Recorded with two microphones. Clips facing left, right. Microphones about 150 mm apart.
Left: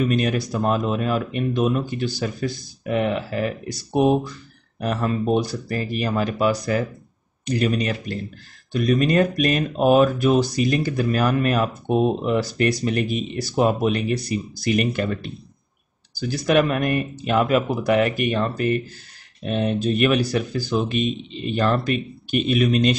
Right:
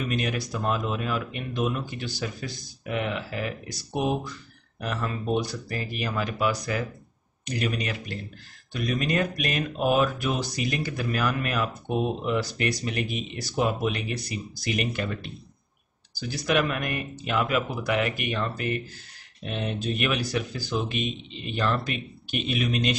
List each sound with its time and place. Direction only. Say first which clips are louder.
0.0 s speech: left 8 dB; 40° left (ahead or behind)